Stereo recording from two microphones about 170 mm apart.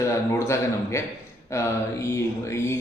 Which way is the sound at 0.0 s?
15° left (ahead or behind).